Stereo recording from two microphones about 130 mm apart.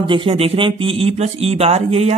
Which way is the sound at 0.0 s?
40° right (ahead or behind).